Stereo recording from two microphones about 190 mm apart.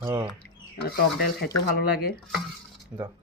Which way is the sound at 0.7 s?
55° left (ahead or behind).